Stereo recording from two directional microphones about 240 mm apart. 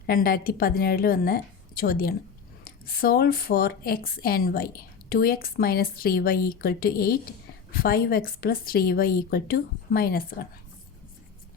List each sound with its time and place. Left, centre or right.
0.1 s speech: left